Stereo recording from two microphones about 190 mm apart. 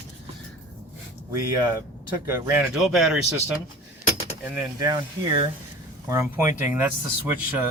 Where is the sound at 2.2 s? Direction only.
10° right (ahead or behind).